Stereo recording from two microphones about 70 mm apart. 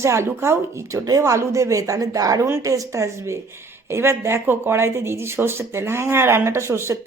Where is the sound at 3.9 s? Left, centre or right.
Right.